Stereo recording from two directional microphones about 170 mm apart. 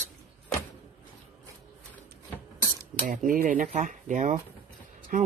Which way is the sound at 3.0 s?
55° right (ahead or behind).